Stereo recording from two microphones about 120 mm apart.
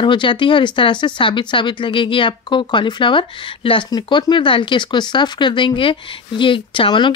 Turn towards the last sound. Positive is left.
turn(degrees=45)  # may be behind; listen again after turning